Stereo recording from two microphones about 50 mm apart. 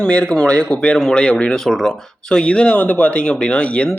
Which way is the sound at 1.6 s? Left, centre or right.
Centre.